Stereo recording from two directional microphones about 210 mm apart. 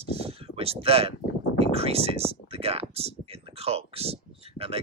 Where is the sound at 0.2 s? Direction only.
30° right (ahead or behind).